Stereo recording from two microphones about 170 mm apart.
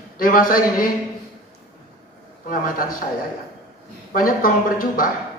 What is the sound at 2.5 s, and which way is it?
Speech, 55° left (ahead or behind).